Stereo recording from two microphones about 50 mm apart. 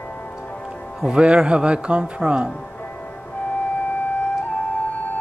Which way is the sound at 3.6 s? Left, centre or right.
Left.